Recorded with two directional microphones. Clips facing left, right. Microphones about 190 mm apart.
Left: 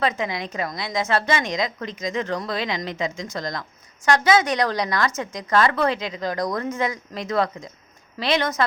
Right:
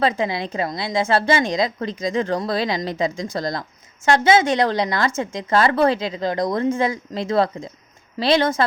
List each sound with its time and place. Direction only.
0.0 s a woman's voice: 30° right (ahead or behind)